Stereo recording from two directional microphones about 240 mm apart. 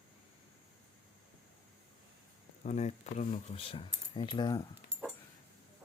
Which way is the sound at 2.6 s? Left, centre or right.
Left.